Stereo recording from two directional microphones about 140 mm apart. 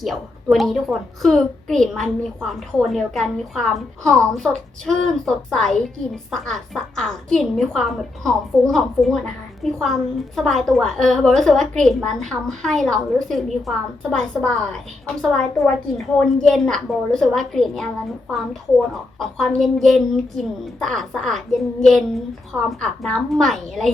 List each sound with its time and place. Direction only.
0.0 s a woman's voice: centre (ahead or behind)
19.2 s a woman's voice: centre (ahead or behind)